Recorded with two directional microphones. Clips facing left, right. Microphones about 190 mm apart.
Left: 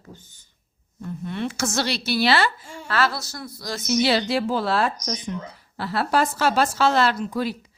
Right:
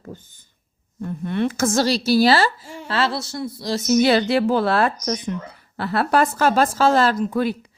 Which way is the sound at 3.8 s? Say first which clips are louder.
Right 4 dB; 45° right (ahead or behind).